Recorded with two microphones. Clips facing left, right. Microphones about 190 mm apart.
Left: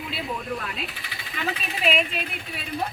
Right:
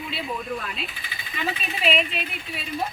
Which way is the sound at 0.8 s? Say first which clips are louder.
Left 1 dB; 75° left (ahead or behind).